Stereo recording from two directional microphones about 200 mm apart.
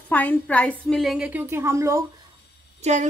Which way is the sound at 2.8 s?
35° right (ahead or behind).